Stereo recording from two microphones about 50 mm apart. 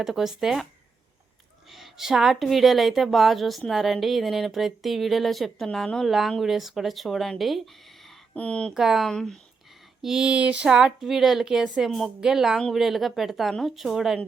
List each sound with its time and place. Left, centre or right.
0.0 s speech: centre
1.7 s speech: centre
6.4 s speech: centre
8.4 s speech: left
8.7 s a woman's voice: centre
9.0 s speech: centre
10.0 s a woman's voice: centre
10.3 s a sound: right
10.7 s a woman's voice: centre